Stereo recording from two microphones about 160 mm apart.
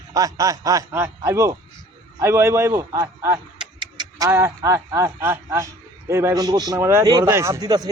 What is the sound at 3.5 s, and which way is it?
A man's voice, 30° right (ahead or behind).